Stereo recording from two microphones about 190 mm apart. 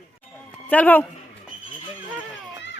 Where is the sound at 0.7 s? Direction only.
10° left (ahead or behind).